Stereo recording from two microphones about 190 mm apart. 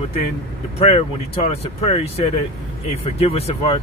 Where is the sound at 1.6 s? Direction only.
30° left (ahead or behind).